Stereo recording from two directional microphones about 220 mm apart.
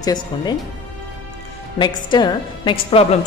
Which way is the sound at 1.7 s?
20° left (ahead or behind).